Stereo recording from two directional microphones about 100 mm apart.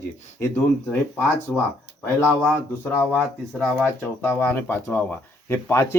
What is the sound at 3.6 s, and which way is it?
Speech, 10° left (ahead or behind).